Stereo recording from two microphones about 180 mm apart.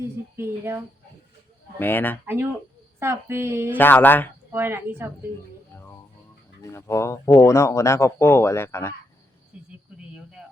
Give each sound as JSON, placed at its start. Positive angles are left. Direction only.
{"t": 0.0, "sound": "speech", "side_deg": -15}
{"t": 1.8, "sound": "speech", "side_deg": 10}
{"t": 2.2, "sound": "speech", "side_deg": -10}
{"t": 3.8, "sound": "speech", "side_deg": 10}
{"t": 4.5, "sound": "speech", "side_deg": -10}
{"t": 5.7, "sound": "music", "side_deg": 15}
{"t": 6.6, "sound": "speech", "side_deg": 15}